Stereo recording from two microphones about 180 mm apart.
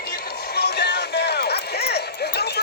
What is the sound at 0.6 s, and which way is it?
Music, 65° left (ahead or behind).